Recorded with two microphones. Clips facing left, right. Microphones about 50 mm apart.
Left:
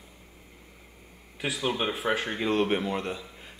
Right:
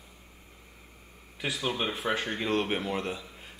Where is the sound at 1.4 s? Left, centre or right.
Centre.